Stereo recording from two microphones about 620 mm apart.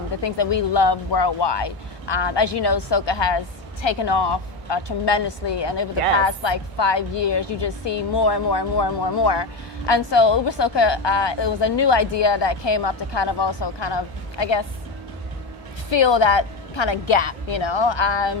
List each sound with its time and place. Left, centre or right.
0.2 s a woman's voice: left
15.9 s a woman's voice: left